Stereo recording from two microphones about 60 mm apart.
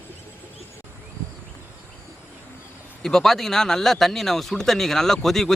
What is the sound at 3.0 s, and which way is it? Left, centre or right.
Speech, centre.